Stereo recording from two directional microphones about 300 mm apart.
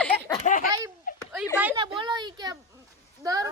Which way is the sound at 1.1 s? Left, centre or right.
Left.